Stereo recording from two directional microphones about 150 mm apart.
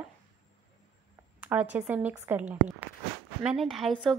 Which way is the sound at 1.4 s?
10° right (ahead or behind).